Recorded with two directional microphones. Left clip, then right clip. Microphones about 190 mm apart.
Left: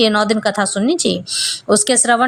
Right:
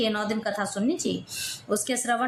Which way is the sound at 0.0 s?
40° left (ahead or behind).